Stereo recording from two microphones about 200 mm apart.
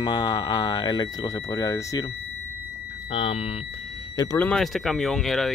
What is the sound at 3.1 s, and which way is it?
Speech, 30° left (ahead or behind).